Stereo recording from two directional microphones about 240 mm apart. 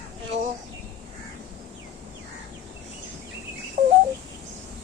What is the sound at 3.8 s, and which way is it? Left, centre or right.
Bird, right.